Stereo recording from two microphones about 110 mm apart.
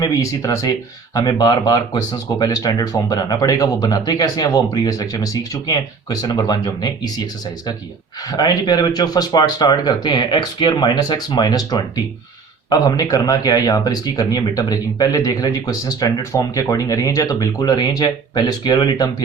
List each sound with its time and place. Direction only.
0.0 s speech: 30° left (ahead or behind)
8.3 s speech: 40° left (ahead or behind)